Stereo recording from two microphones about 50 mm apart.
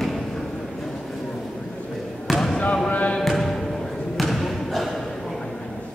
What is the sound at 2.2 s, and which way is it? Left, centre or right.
Basketball bounce, centre.